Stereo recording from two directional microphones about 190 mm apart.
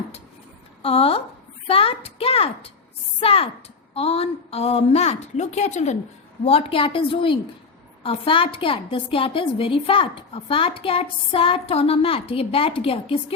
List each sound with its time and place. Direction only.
0.8 s a woman's voice: 30° left (ahead or behind)